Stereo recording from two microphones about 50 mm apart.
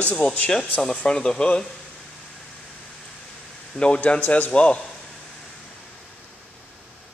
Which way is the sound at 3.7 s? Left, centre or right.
Left.